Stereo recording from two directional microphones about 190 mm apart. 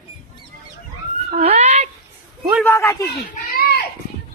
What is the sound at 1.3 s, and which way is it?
Cat, 35° right (ahead or behind).